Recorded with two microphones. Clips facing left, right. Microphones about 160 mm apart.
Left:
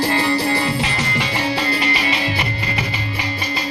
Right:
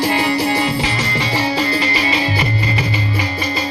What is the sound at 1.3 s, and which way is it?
Music, 30° right (ahead or behind).